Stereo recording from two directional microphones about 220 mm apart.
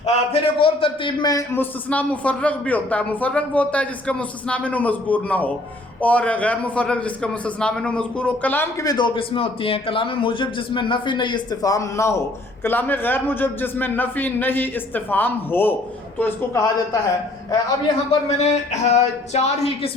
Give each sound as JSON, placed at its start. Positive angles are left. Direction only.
{"t": 0.0, "sound": "a man's voice", "side_deg": 25}
{"t": 18.3, "sound": "speech", "side_deg": 30}